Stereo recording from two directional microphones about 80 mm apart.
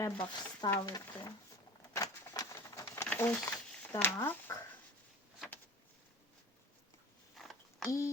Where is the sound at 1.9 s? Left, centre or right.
Left.